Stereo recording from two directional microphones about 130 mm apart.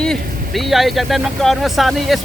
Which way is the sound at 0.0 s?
5° left (ahead or behind).